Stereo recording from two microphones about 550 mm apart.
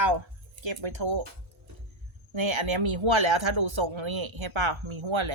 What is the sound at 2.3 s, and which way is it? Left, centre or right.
Speech, right.